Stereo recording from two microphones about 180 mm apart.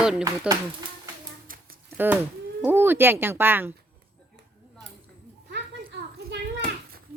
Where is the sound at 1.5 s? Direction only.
50° right (ahead or behind).